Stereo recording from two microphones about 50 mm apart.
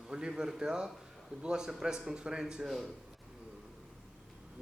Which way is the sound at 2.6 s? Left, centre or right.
Centre.